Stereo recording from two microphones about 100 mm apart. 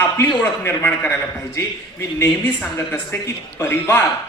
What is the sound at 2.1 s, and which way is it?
Speech, 20° left (ahead or behind).